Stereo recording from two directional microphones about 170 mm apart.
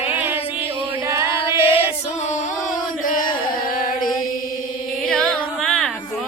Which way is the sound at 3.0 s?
55° left (ahead or behind).